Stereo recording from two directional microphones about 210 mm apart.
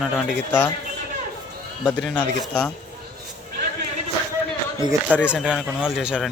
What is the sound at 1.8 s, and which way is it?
Speech, 5° left (ahead or behind).